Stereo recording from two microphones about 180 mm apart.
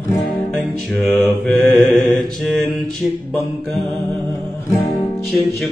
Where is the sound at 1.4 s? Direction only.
Centre (ahead or behind).